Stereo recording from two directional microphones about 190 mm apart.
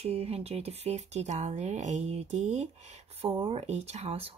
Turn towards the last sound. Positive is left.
turn(degrees=-35)  # may be behind; listen again after turning